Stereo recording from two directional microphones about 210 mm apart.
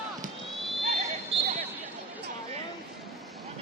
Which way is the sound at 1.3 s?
25° right (ahead or behind).